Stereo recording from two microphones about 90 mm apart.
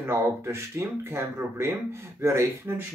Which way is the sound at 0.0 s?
30° right (ahead or behind).